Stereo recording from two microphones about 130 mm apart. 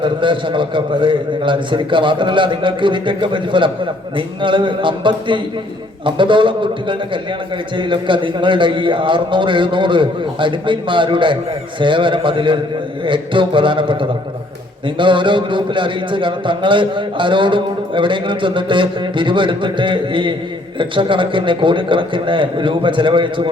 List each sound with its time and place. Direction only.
0.0 s a man's voice: 40° right (ahead or behind)